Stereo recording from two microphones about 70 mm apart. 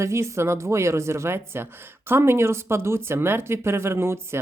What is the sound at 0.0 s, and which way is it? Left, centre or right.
Speech, right.